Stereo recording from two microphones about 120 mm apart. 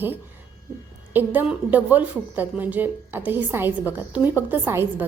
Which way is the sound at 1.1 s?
15° right (ahead or behind).